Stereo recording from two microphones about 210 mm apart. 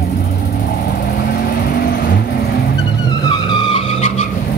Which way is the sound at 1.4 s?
50° left (ahead or behind).